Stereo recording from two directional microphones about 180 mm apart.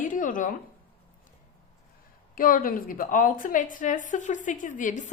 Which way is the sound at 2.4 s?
50° left (ahead or behind).